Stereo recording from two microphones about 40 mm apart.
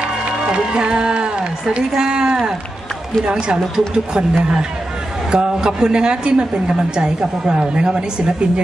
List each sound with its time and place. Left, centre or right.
0.8 s speech: right